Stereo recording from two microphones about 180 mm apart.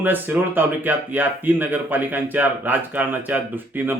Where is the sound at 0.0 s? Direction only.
10° right (ahead or behind).